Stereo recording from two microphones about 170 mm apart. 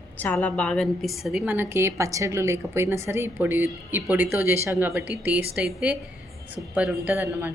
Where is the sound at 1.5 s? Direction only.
15° right (ahead or behind).